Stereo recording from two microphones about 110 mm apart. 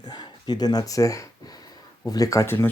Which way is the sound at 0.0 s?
40° left (ahead or behind).